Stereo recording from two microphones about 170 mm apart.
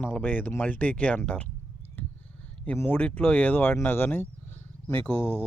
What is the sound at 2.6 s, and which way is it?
Speech, 10° left (ahead or behind).